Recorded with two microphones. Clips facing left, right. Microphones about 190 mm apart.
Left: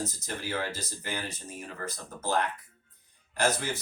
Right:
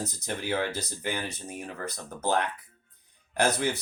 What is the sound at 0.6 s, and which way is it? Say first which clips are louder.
Speech: right 5 dB; 60° right (ahead or behind).